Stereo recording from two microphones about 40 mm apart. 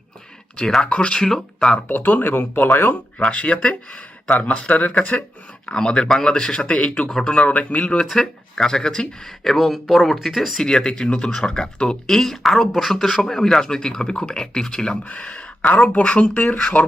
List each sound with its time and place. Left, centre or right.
0.9 s speech: left
1.1 s speech: centre
1.9 s speech: left
3.2 s speech: left
5.6 s speech: centre
6.7 s speech: left
7.1 s speech: centre
7.4 s speech: left
8.0 s speech: centre
9.4 s speech: centre
10.6 s speech: centre
12.0 s speech: centre
15.0 s speech: left